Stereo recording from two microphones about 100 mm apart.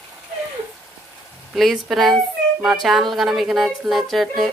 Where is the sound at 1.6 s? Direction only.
Centre (ahead or behind).